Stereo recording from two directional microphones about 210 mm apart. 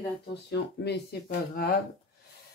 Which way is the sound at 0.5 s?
50° left (ahead or behind).